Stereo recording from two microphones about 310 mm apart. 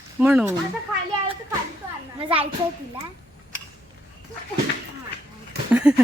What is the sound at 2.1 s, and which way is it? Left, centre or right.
Speech, centre.